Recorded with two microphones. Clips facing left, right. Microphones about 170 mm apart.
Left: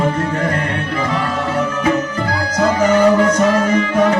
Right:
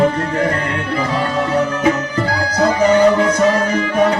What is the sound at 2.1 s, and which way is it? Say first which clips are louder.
Music: right 1 dB; 35° right (ahead or behind).